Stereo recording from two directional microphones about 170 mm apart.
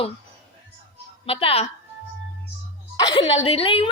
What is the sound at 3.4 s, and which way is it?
Speech, 35° left (ahead or behind).